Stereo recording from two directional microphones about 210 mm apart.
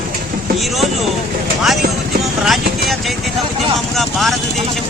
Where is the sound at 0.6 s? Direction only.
Centre (ahead or behind).